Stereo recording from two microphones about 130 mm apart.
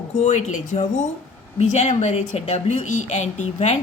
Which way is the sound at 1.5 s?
60° left (ahead or behind).